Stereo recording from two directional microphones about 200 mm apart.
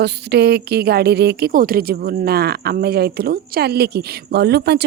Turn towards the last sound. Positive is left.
turn(degrees=-55)  # may be behind; listen again after turning